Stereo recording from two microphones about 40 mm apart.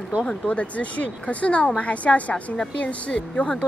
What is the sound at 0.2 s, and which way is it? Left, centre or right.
Speech, left.